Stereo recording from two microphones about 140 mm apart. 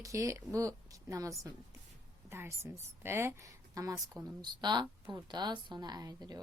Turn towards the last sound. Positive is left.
turn(degrees=-25)  # may be behind; listen again after turning